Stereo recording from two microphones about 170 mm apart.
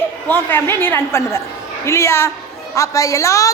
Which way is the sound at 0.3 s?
10° left (ahead or behind).